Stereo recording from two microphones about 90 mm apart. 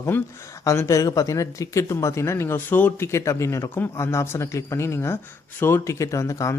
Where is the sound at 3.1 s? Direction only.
35° left (ahead or behind).